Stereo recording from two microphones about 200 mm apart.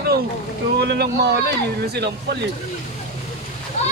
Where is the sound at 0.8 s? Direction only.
55° right (ahead or behind).